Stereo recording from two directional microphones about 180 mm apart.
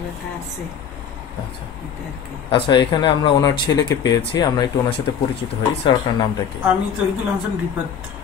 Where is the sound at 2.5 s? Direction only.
30° left (ahead or behind).